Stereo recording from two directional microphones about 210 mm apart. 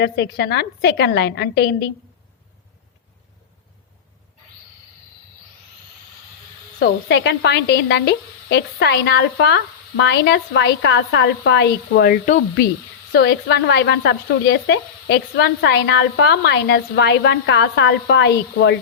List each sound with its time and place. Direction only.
0.0 s speech: 50° left (ahead or behind)
6.7 s speech: 55° left (ahead or behind)